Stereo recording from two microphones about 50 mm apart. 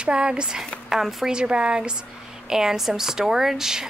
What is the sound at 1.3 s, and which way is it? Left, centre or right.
A woman's voice, centre.